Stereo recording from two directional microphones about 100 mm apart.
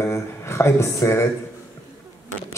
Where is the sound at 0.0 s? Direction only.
25° left (ahead or behind).